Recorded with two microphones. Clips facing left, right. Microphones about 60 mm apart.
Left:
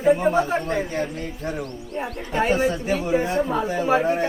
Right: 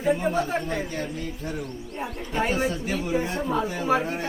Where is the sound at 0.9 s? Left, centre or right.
Left.